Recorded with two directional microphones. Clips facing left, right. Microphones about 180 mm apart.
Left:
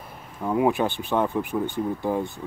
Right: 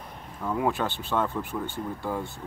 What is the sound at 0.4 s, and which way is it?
Speech, 20° left (ahead or behind).